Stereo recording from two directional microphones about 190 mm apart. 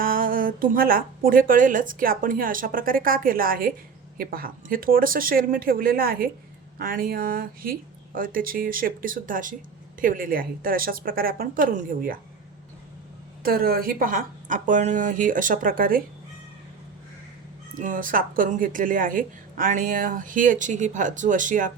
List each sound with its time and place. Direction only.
0.0 s a woman's voice: 50° right (ahead or behind)
13.4 s a woman's voice: 50° right (ahead or behind)
17.7 s a woman's voice: 45° right (ahead or behind)